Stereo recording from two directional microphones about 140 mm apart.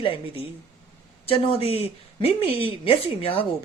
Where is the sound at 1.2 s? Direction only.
40° left (ahead or behind).